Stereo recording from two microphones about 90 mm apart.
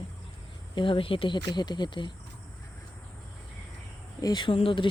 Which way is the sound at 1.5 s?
55° left (ahead or behind).